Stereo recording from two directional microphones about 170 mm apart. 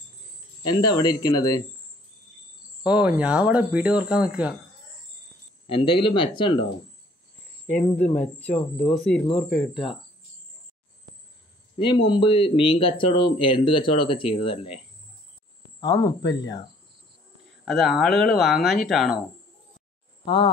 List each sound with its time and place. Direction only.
0.7 s speech: 25° left (ahead or behind)
2.8 s speech: 5° right (ahead or behind)
5.7 s speech: 30° left (ahead or behind)
7.6 s speech: 10° left (ahead or behind)
8.5 s speech: 40° left (ahead or behind)
9.0 s speech: 5° left (ahead or behind)
11.1 s a sound: 25° right (ahead or behind)
11.8 s speech: 30° left (ahead or behind)
15.8 s speech: 20° left (ahead or behind)
17.6 s speech: centre (ahead or behind)